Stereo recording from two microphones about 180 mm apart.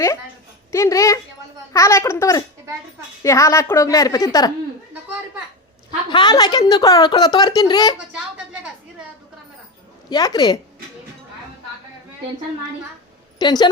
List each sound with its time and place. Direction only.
0.7 s a woman's voice: 15° left (ahead or behind)
6.1 s a woman's voice: 25° left (ahead or behind)
10.1 s a woman's voice: 20° left (ahead or behind)
13.4 s a woman's voice: 25° left (ahead or behind)